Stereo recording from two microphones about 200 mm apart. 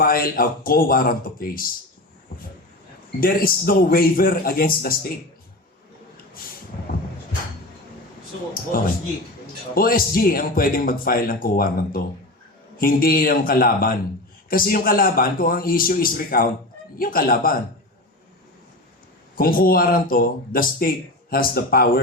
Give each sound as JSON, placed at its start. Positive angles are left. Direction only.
{"t": 0.0, "sound": "speech", "side_deg": 45}
{"t": 3.2, "sound": "speech", "side_deg": 45}
{"t": 9.7, "sound": "speech", "side_deg": 45}
{"t": 19.4, "sound": "speech", "side_deg": 45}